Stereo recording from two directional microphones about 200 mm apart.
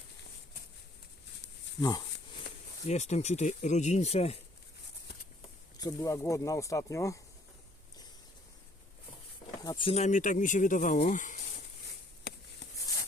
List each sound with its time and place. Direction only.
1.8 s speech: 20° left (ahead or behind)
2.8 s speech: 35° left (ahead or behind)
5.7 s speech: 15° left (ahead or behind)
9.6 s speech: 20° left (ahead or behind); by 11.6 s 40° left (ahead or behind)